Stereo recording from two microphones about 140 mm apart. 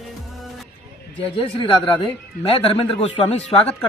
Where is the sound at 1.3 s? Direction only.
40° left (ahead or behind).